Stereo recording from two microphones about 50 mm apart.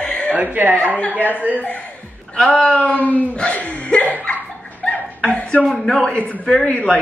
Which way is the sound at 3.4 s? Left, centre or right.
Left.